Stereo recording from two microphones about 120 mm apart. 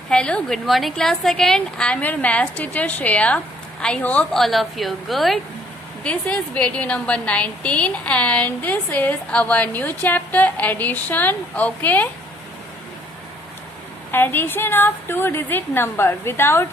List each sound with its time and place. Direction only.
0.1 s a woman's voice: 5° left (ahead or behind)
6.0 s a woman's voice: 10° left (ahead or behind)
14.1 s a woman's voice: 15° left (ahead or behind)